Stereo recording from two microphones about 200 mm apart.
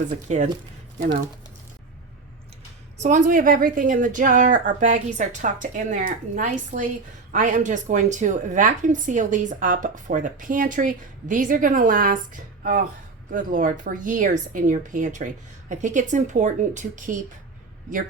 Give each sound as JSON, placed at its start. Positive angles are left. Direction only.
{"t": 0.3, "sound": "a woman's voice", "side_deg": -35}
{"t": 3.0, "sound": "a woman's voice", "side_deg": -40}